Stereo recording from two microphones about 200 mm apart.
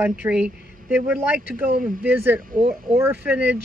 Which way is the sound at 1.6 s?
45° right (ahead or behind).